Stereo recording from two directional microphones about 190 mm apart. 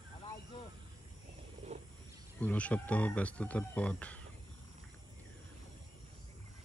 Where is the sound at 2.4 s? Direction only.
10° left (ahead or behind).